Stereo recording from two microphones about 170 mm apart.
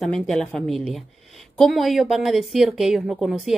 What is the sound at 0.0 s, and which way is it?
Speech, 5° left (ahead or behind).